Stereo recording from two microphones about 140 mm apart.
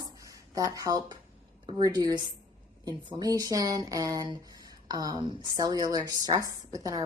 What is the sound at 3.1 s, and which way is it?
A woman's voice, 30° right (ahead or behind).